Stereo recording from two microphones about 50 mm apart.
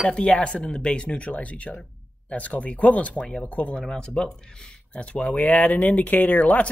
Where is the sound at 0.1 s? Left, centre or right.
Left.